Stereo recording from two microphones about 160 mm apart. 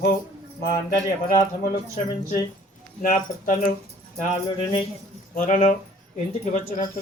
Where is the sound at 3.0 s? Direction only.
55° left (ahead or behind).